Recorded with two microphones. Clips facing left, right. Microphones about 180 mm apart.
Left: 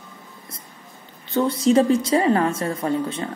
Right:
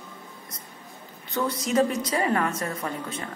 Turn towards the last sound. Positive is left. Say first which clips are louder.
# left 9 dB
turn(degrees=30)  # may be behind; listen again after turning